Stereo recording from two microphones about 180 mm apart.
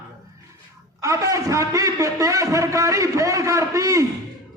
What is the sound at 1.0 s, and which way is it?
A man's voice, 20° right (ahead or behind).